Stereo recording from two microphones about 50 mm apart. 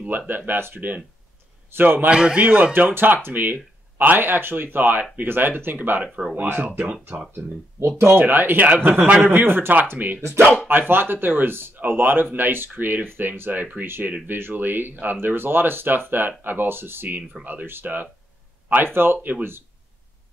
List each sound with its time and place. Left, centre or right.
0.3 s speech: right
2.0 s a man's voice: centre
2.7 s speech: right
8.0 s speech: right
9.9 s speech: right
17.4 s speech: right